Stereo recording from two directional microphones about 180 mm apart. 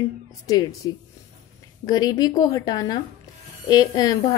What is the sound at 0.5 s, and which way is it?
A woman's voice, 20° left (ahead or behind).